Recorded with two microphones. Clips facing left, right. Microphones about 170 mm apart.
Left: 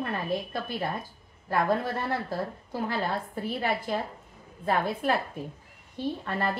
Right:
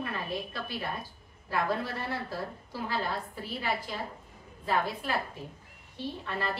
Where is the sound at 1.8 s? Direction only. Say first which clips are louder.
Left 4 dB; 50° left (ahead or behind).